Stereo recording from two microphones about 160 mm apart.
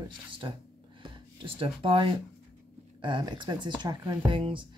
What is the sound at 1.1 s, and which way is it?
Speech, 35° right (ahead or behind).